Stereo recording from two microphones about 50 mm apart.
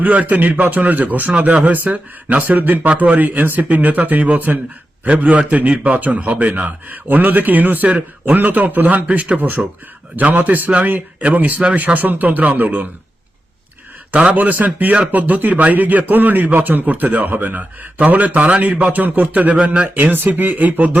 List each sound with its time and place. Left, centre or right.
0.0 s a man's voice: right
14.1 s a man's voice: right
19.9 s a man's voice: right